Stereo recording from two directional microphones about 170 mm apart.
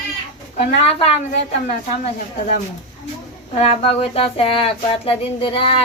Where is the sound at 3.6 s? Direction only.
35° left (ahead or behind).